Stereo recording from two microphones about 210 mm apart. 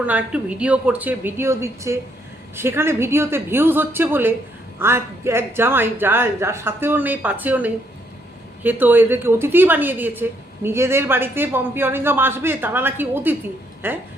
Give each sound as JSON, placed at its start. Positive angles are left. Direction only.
{"t": 0.0, "sound": "a woman's voice", "side_deg": -5}